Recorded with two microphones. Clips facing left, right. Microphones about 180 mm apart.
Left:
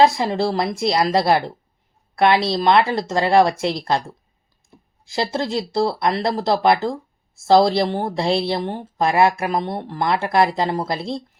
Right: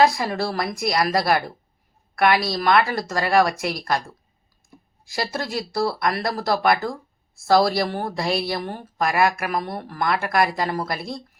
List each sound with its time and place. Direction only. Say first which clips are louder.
0.0 s speech: left 3 dB; 25° left (ahead or behind)